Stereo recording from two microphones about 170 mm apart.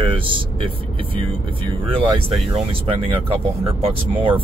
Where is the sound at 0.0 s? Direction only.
30° right (ahead or behind).